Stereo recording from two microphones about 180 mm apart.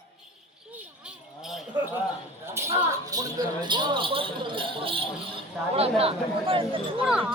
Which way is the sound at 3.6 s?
25° right (ahead or behind).